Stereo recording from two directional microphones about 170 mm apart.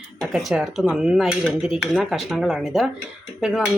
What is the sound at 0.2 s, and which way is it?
Speech, centre (ahead or behind).